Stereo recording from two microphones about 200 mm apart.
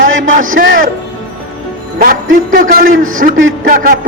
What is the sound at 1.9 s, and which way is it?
A man's voice, 45° right (ahead or behind).